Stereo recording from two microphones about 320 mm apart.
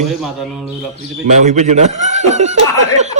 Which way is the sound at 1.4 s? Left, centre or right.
Right.